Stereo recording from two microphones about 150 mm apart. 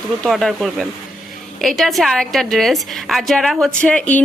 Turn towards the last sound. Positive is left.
turn(degrees=10)  # may be behind; listen again after turning